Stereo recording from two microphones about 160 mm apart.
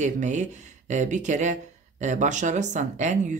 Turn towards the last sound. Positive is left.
turn(degrees=-50)  # may be behind; listen again after turning